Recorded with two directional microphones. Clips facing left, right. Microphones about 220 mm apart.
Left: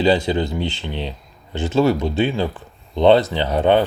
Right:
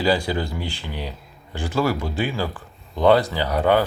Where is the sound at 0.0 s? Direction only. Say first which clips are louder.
Left 4 dB; 20° left (ahead or behind).